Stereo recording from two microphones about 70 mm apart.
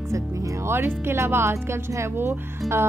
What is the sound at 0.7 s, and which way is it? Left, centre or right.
Speech, right.